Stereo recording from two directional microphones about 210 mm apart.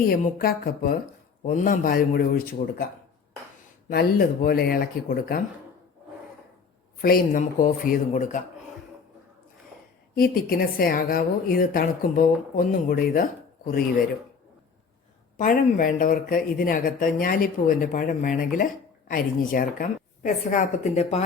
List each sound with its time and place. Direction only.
0.1 s a woman's voice: 45° left (ahead or behind)
4.4 s a woman's voice: 45° left (ahead or behind)
7.0 s speech: 40° left (ahead or behind)
10.2 s a woman's voice: 45° left (ahead or behind)
15.4 s speech: 40° left (ahead or behind)